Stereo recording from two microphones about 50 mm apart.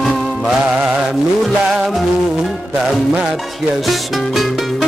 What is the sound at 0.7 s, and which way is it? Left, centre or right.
Mantra, centre.